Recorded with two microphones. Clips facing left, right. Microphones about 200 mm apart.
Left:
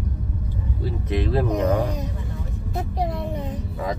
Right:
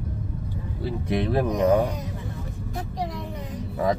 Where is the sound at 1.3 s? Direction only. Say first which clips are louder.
Left 2 dB; 15° right (ahead or behind).